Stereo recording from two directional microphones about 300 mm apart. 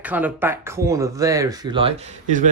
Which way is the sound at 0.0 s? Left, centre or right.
Centre.